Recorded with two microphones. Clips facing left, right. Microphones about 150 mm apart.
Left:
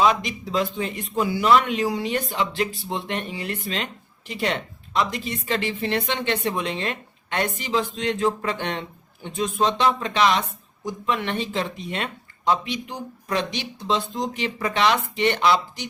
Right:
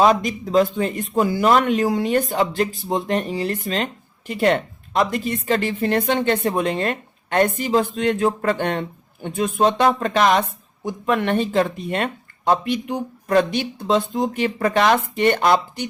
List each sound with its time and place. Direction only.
0.0 s speech: 45° right (ahead or behind)